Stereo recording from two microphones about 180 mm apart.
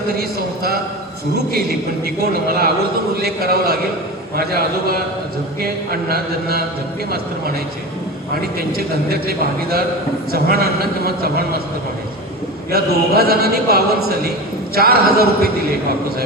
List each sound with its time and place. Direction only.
0.2 s a man's voice: 60° right (ahead or behind)
8.5 s a man's voice: 60° right (ahead or behind)
12.7 s a man's voice: 60° right (ahead or behind)